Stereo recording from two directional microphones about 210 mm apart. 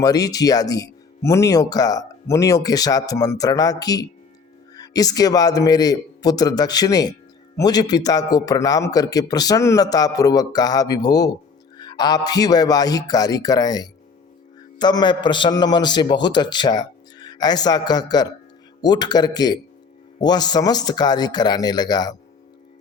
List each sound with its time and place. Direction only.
0.0 s a man's voice: 15° left (ahead or behind)